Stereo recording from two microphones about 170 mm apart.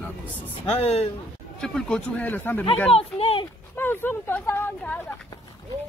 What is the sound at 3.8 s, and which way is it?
Speech, 15° left (ahead or behind).